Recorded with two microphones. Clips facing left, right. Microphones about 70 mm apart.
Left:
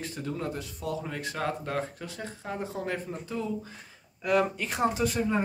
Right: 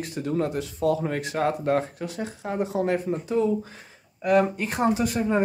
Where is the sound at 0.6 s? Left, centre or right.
Right.